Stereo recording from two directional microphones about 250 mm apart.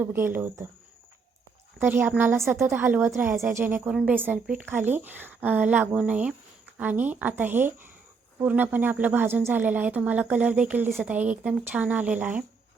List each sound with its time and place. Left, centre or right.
0.0 s speech: centre
1.8 s speech: centre